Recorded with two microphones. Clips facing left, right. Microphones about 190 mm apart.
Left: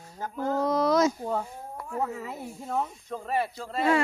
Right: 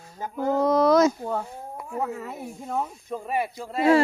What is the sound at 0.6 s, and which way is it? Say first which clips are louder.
Speech: right 5 dB; 60° right (ahead or behind).